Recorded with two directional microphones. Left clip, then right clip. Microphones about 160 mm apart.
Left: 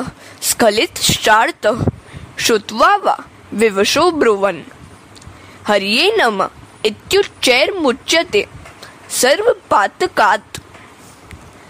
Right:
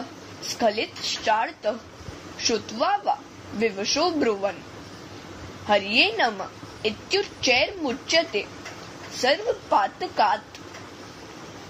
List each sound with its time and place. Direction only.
0.6 s a woman's voice: 65° left (ahead or behind)
5.7 s a woman's voice: 60° left (ahead or behind)